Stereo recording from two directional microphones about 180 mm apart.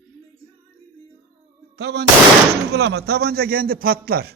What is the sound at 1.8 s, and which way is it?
Gunshot, 70° right (ahead or behind).